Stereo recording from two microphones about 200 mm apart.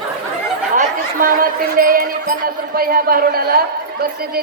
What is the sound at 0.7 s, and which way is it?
Speech, 45° right (ahead or behind).